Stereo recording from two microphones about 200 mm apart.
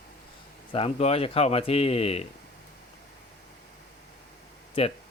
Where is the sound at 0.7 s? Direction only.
30° left (ahead or behind).